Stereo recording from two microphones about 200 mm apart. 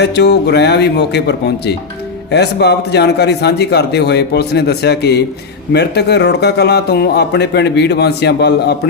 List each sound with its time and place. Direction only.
0.0 s a man's voice: 55° left (ahead or behind)